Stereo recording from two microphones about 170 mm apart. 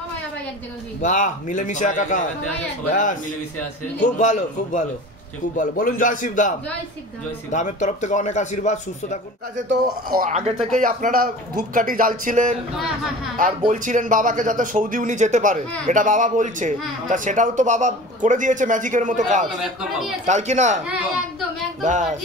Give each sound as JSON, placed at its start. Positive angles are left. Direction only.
{"t": 1.0, "sound": "speech", "side_deg": 45}
{"t": 4.2, "sound": "speech", "side_deg": 45}
{"t": 7.5, "sound": "speech", "side_deg": 45}
{"t": 9.6, "sound": "a man's voice", "side_deg": -50}
{"t": 10.3, "sound": "a man's voice", "side_deg": -40}
{"t": 12.7, "sound": "speech", "side_deg": 0}
{"t": 13.7, "sound": "a man's voice", "side_deg": -50}
{"t": 21.8, "sound": "a man's voice", "side_deg": -45}